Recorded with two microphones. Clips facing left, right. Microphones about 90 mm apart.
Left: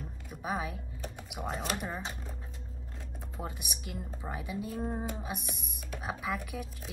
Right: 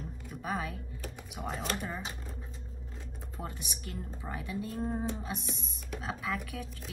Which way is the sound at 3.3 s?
15° left (ahead or behind).